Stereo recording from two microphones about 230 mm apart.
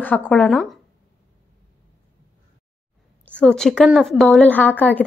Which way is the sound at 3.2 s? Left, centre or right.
Centre.